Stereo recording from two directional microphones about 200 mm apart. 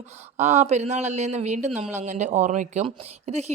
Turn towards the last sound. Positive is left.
turn(degrees=-35)  # may be behind; listen again after turning